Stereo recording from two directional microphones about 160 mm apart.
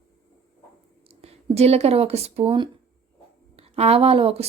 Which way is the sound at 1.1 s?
40° right (ahead or behind).